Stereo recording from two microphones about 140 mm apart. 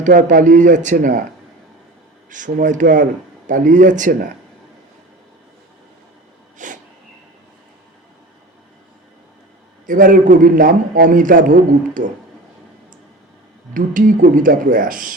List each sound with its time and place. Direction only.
0.0 s a man's voice: 70° right (ahead or behind)
2.3 s speech: 65° right (ahead or behind)
6.6 s a sound: 65° right (ahead or behind)
9.8 s a man's voice: 75° right (ahead or behind)
13.7 s a man's voice: 75° right (ahead or behind)